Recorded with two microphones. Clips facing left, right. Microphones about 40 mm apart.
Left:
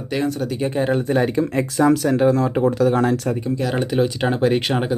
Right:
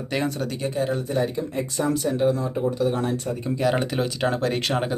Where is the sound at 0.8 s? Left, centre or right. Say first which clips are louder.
Left 5 dB; left.